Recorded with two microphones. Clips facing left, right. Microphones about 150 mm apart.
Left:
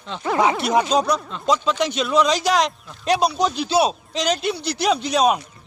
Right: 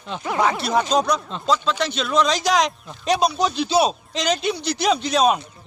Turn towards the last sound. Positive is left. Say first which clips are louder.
# even
turn(degrees=10)  # may be behind; listen again after turning